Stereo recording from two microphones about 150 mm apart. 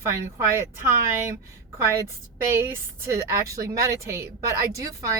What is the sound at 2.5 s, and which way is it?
A woman's voice, 15° right (ahead or behind).